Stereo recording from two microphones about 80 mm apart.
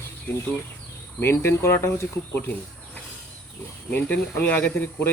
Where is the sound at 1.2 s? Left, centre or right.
Left.